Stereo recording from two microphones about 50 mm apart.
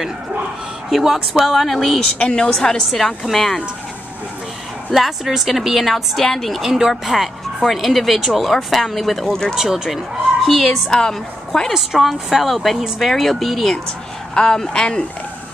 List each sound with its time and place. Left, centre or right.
0.8 s speech: centre
2.1 s speech: left
2.9 s speech: centre
4.9 s speech: centre
6.6 s speech: centre
9.6 s speech: centre
10.9 s a woman's voice: centre
11.7 s speech: centre
14.3 s speech: centre